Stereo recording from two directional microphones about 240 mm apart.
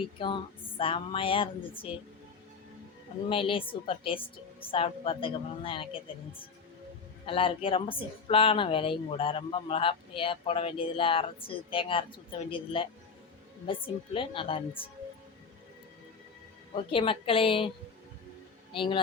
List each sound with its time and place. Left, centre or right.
0.2 s speech: left
3.2 s speech: left
16.7 s speech: left
18.7 s speech: left